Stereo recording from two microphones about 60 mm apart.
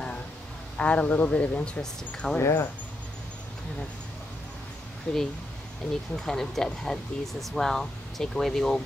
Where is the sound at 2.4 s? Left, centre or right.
Left.